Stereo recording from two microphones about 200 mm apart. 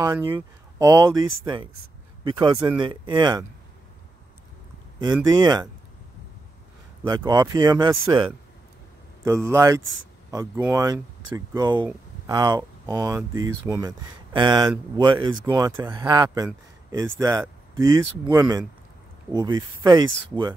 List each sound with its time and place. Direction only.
0.0 s speech: 15° right (ahead or behind)
4.9 s speech: 20° right (ahead or behind)
7.1 s speech: 20° right (ahead or behind)
9.2 s speech: 15° right (ahead or behind)